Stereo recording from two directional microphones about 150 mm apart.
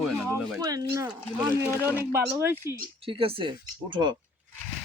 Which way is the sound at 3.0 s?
35° right (ahead or behind).